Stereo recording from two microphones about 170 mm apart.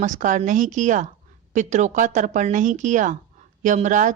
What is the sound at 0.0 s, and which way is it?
Speech, 45° right (ahead or behind).